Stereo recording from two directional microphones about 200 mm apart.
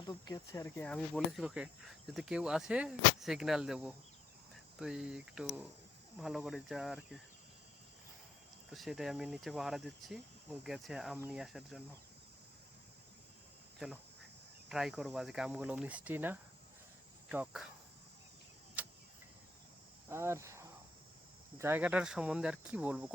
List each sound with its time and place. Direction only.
0.0 s speech: 20° left (ahead or behind)
0.9 s speech: 5° left (ahead or behind)
8.7 s speech: centre (ahead or behind)
13.7 s cricket: 5° right (ahead or behind)
14.7 s speech: centre (ahead or behind)
18.8 s cricket: 10° right (ahead or behind)
20.1 s speech: 15° right (ahead or behind)